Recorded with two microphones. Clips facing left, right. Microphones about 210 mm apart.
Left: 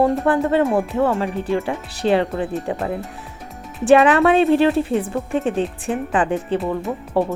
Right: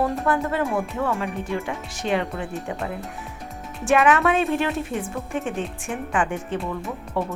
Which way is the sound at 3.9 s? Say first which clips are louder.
Left 6 dB; 35° left (ahead or behind).